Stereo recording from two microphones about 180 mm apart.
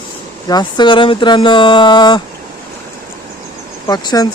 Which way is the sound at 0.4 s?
25° left (ahead or behind).